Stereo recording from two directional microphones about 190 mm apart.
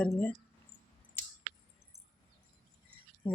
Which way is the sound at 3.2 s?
10° left (ahead or behind).